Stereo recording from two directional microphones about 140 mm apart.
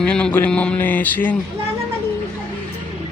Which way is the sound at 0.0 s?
5° left (ahead or behind).